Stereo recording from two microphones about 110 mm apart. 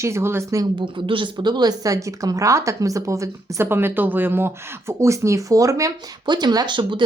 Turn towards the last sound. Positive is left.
turn(degrees=-45)  # may be behind; listen again after turning